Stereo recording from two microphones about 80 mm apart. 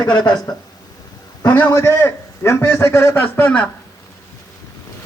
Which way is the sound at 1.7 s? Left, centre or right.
Left.